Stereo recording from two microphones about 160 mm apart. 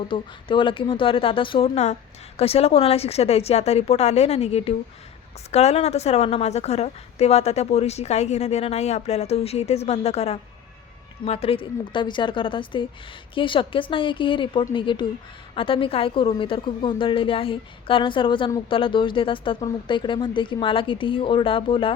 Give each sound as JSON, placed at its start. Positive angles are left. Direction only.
{"t": 0.1, "sound": "a woman's voice", "side_deg": 30}